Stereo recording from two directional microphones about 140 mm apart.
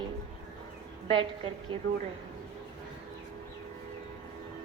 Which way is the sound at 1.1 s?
40° right (ahead or behind).